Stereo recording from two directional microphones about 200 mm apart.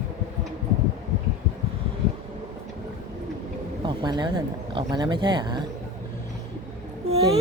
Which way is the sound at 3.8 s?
20° right (ahead or behind).